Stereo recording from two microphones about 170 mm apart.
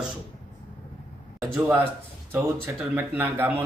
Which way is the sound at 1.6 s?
10° right (ahead or behind).